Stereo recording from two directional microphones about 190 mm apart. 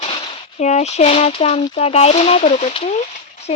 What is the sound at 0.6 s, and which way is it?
Speech, 35° left (ahead or behind).